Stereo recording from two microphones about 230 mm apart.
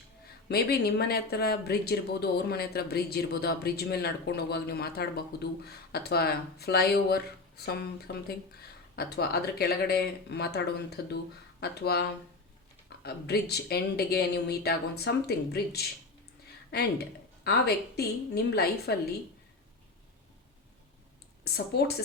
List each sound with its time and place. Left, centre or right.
0.4 s speech: left
17.4 s speech: left
21.4 s speech: left